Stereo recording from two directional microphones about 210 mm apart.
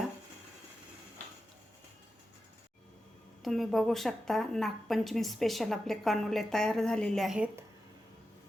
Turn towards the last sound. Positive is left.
turn(degrees=-5)  # may be behind; listen again after turning